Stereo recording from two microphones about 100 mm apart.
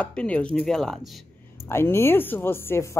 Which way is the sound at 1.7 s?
25° left (ahead or behind).